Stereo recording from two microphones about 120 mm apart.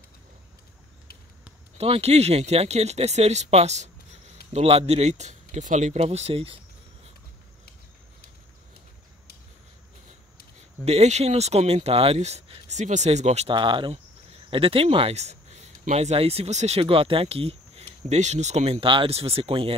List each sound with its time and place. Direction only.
1.8 s speech: 60° right (ahead or behind)
10.9 s speech: 65° right (ahead or behind)
12.7 s speech: 80° right
13.5 s speech: 45° right (ahead or behind)